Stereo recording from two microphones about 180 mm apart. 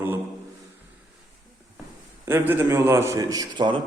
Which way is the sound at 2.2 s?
10° right (ahead or behind).